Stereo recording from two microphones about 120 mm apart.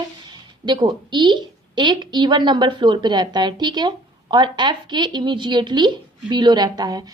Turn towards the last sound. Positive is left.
turn(degrees=-35)  # may be behind; listen again after turning